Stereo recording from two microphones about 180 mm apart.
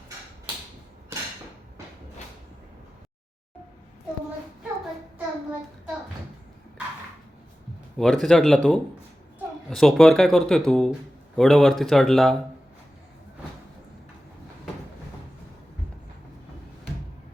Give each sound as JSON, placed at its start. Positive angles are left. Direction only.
{"t": 7.9, "sound": "speech", "side_deg": 0}